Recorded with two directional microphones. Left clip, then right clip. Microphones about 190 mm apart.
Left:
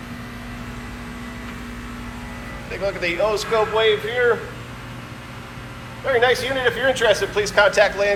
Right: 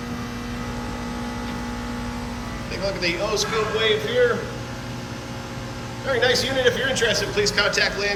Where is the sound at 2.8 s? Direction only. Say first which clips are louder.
Left 4 dB; 10° right (ahead or behind).